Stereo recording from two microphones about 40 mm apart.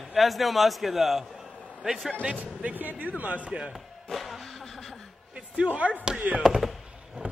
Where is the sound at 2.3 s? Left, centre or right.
Right.